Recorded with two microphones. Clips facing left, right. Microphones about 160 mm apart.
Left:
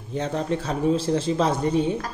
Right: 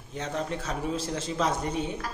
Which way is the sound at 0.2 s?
30° left (ahead or behind).